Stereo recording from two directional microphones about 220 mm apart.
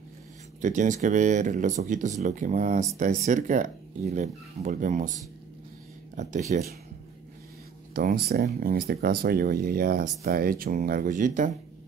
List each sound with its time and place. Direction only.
0.6 s speech: 35° right (ahead or behind)
6.5 s speech: 35° right (ahead or behind)
7.9 s speech: 40° right (ahead or behind)